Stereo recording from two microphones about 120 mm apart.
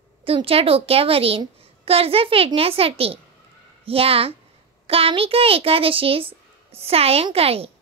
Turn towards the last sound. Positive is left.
turn(degrees=-55)  # may be behind; listen again after turning